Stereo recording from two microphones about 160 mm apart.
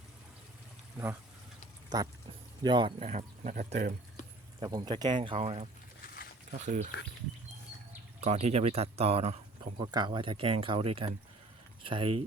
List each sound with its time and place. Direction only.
1.9 s speech: 25° right (ahead or behind)
3.0 s speech: 50° right (ahead or behind)
4.6 s speech: 25° right (ahead or behind)
6.5 s speech: 50° right (ahead or behind)
8.2 s speech: 40° right (ahead or behind)
9.7 s speech: 25° right (ahead or behind)